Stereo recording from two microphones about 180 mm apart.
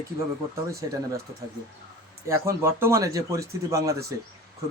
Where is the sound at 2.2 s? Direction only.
15° right (ahead or behind).